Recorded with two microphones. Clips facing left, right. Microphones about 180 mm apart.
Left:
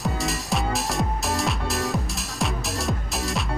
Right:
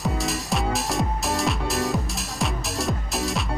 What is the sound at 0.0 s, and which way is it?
Music, centre (ahead or behind).